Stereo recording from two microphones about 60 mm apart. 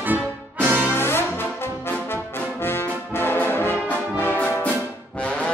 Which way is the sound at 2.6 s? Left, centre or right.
Left.